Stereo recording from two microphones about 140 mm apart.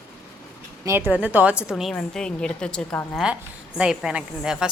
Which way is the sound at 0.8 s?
15° right (ahead or behind).